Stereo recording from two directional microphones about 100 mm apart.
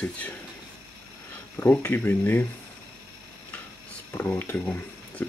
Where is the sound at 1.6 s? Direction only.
20° left (ahead or behind).